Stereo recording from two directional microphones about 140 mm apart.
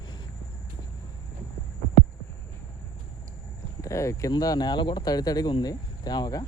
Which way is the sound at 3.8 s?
20° left (ahead or behind).